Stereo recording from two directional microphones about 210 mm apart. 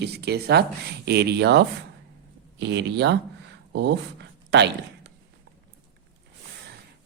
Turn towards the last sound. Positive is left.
turn(degrees=-55)  # may be behind; listen again after turning